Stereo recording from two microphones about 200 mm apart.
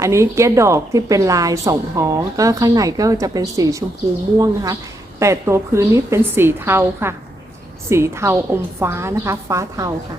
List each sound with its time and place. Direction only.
0.0 s a woman's voice: 15° right (ahead or behind)